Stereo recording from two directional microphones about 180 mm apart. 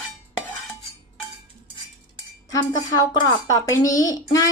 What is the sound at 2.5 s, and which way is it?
A woman's voice, 20° left (ahead or behind).